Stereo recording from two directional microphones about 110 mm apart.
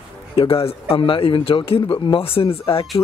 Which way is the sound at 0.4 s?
60° left (ahead or behind).